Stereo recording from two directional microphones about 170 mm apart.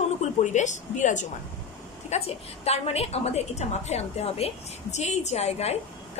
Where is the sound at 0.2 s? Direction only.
45° left (ahead or behind).